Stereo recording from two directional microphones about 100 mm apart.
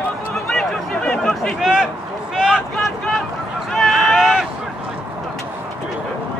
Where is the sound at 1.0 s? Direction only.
5° left (ahead or behind).